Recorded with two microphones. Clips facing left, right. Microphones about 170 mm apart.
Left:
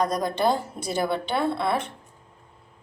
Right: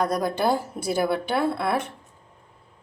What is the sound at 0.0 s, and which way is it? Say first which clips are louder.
A woman's voice: even; 5° right (ahead or behind).